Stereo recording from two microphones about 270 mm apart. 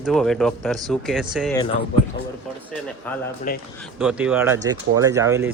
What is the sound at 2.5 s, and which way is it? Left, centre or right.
Speech, centre.